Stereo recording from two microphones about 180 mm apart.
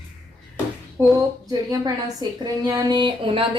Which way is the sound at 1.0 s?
15° right (ahead or behind).